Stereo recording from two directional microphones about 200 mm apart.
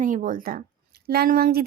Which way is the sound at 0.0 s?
40° right (ahead or behind).